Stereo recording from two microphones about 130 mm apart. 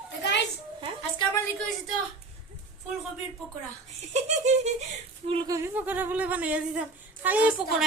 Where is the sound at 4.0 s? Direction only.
60° right (ahead or behind).